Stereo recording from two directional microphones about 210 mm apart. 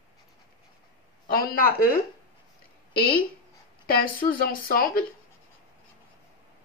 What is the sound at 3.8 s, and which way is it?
Speech, 45° left (ahead or behind).